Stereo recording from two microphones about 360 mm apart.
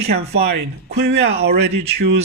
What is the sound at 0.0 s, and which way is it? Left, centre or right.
A man's voice, right.